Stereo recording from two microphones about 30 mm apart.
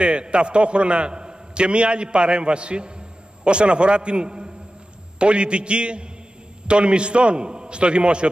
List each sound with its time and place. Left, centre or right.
0.0 s a man's voice: right